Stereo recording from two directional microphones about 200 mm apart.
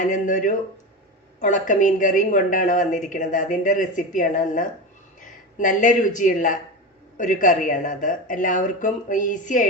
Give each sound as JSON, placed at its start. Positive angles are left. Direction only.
{"t": 0.0, "sound": "a woman's voice", "side_deg": 40}